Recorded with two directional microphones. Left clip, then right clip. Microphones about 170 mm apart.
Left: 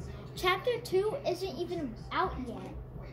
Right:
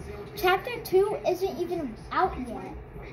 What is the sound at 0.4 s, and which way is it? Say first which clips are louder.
A child's voice: right 4 dB; 15° left (ahead or behind).